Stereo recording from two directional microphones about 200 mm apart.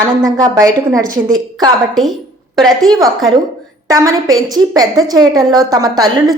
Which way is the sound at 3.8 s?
15° right (ahead or behind).